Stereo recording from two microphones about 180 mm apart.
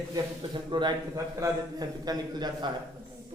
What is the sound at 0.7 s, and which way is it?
A man's voice, 25° right (ahead or behind).